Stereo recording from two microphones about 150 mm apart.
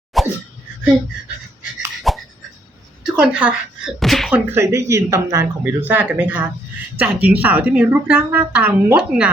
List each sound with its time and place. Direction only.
0.1 s sneeze: centre (ahead or behind)
2.1 s a sound: centre (ahead or behind)
3.1 s speech: 5° right (ahead or behind)
4.5 s a woman's voice: 20° right (ahead or behind)